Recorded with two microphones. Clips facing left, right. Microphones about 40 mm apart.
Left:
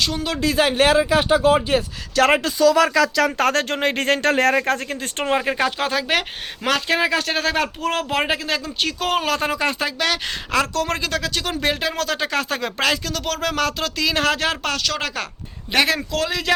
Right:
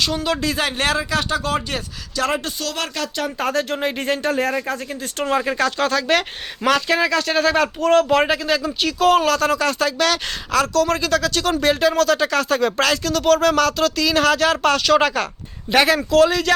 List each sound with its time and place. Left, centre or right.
0.0 s speech: centre
2.1 s speech: left
5.1 s speech: left
5.5 s speech: centre
9.4 s speech: left
10.5 s speech: left
11.1 s speech: centre
13.6 s speech: centre
14.6 s speech: centre